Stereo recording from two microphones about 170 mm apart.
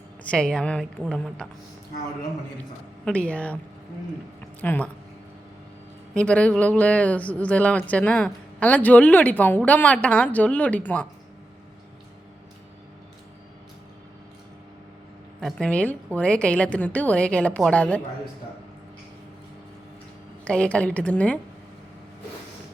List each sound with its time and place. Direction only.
0.3 s a woman's voice: 5° left (ahead or behind)
3.0 s speech: 5° left (ahead or behind)
4.6 s speech: 10° left (ahead or behind)
6.1 s speech: 5° left (ahead or behind)
15.4 s a woman's voice: 5° left (ahead or behind)
20.4 s speech: 5° left (ahead or behind)